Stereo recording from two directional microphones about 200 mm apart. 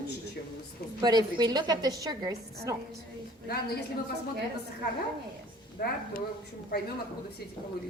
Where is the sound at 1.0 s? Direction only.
20° right (ahead or behind).